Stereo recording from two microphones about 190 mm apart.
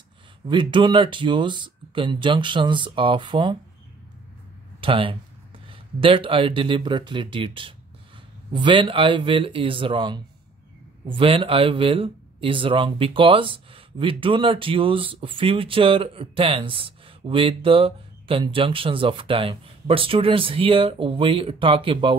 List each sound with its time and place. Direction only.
0.5 s speech: 25° right (ahead or behind)
4.7 s speech: 30° right (ahead or behind)